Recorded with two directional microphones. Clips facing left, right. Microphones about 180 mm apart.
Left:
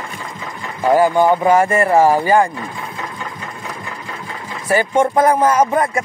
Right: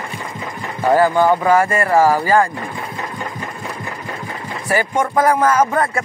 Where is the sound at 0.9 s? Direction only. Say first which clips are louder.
Left 1 dB; 15° left (ahead or behind).